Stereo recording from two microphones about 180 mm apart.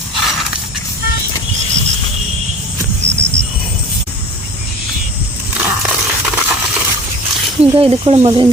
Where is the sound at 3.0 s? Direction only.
40° right (ahead or behind).